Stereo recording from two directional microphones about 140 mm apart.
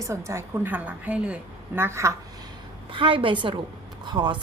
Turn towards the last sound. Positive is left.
turn(degrees=-30)  # may be behind; listen again after turning